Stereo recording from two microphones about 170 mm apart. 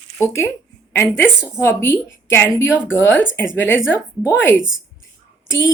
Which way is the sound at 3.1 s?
90° left.